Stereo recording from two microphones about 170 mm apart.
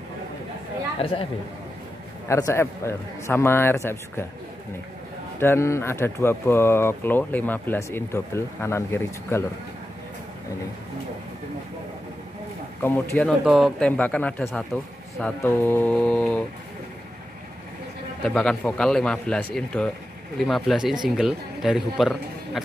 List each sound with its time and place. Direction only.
2.2 s speech: 15° left (ahead or behind)
5.4 s speech: 15° left (ahead or behind)
12.8 s speech: 10° left (ahead or behind)
13.4 s a man's voice: centre (ahead or behind)
18.2 s a man's voice: 5° left (ahead or behind)